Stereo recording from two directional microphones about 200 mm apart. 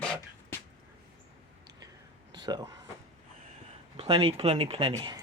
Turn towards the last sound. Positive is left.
turn(degrees=-20)  # may be behind; listen again after turning